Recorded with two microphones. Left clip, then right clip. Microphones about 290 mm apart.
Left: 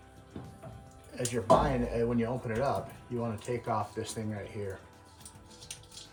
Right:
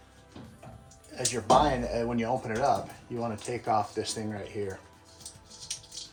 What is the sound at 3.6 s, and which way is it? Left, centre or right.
Speech, centre.